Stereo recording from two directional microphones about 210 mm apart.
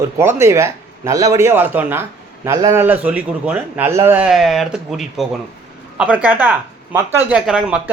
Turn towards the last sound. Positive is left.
turn(degrees=-5)  # may be behind; listen again after turning